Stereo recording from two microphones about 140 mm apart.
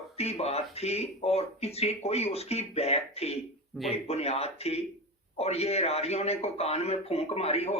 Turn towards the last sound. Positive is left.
turn(degrees=45)  # may be behind; listen again after turning